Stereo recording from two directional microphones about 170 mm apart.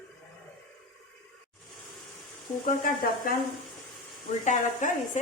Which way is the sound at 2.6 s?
55° left (ahead or behind).